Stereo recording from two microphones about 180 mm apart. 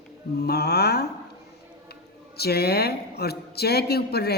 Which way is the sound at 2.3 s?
60° left (ahead or behind).